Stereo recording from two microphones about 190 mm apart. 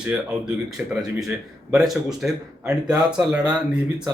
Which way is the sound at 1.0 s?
Centre (ahead or behind).